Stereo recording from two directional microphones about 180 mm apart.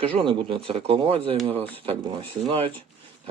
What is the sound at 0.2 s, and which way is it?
Speech, 30° right (ahead or behind).